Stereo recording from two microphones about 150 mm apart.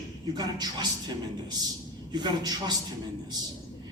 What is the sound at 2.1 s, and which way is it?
Speech, 30° right (ahead or behind).